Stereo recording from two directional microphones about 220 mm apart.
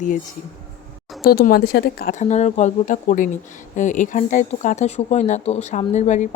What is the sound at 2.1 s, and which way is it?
Speech, 35° left (ahead or behind).